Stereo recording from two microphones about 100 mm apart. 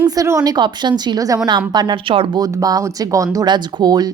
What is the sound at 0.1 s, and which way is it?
Speech, 35° right (ahead or behind).